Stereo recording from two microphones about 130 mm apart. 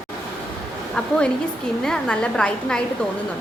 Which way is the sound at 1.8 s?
5° left (ahead or behind).